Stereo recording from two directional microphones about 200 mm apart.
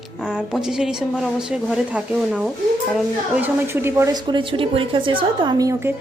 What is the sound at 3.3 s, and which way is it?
A woman's voice, 10° right (ahead or behind).